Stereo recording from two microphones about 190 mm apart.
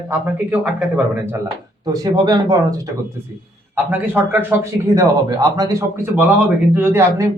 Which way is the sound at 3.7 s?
10° right (ahead or behind).